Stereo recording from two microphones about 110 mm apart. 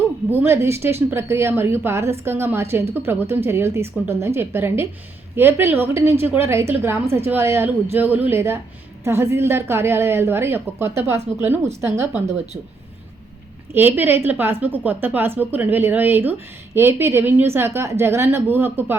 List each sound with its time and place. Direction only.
0.3 s a woman's voice: 20° right (ahead or behind)
13.7 s a woman's voice: 20° right (ahead or behind)